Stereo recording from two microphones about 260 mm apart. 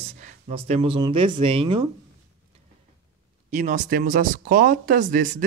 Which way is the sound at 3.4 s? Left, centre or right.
Right.